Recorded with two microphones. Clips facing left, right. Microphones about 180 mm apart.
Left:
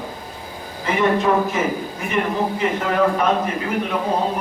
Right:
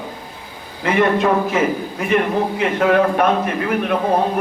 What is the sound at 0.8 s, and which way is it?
Speech, 70° right (ahead or behind).